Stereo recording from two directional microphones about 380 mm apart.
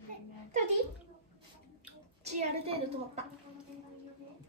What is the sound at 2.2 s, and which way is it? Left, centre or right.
Speech, centre.